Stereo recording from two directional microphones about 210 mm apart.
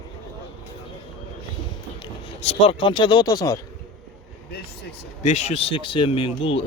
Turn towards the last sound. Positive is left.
turn(degrees=25)  # may be behind; listen again after turning